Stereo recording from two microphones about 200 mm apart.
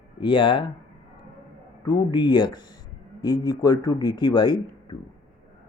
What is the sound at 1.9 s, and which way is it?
Speech, 20° left (ahead or behind).